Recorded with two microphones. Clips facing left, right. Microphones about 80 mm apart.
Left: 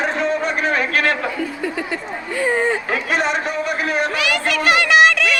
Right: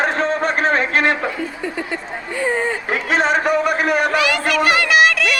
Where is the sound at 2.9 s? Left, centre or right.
Right.